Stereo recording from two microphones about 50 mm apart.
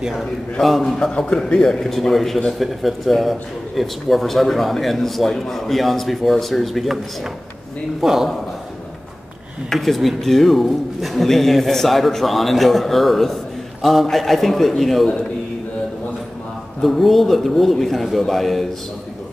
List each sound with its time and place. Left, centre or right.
0.2 s a man's voice: centre
0.9 s a man's voice: centre
8.0 s a man's voice: centre
9.7 s a man's voice: centre
16.8 s a man's voice: centre